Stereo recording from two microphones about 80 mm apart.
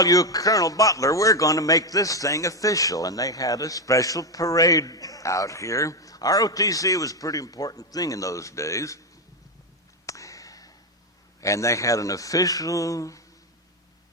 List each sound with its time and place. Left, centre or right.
0.0 s a man's voice: left
10.1 s a sound: left
11.3 s a man's voice: left